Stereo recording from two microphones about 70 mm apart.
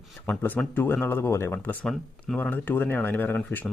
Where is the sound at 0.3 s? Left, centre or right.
Left.